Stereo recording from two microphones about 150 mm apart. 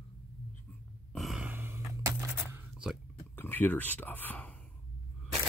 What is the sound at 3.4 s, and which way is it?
Speech, 15° left (ahead or behind).